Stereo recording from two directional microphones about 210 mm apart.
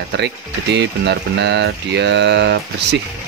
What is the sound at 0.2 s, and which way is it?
Speech, 55° right (ahead or behind).